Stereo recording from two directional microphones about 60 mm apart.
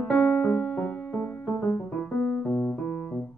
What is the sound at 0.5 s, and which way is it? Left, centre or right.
Music, centre.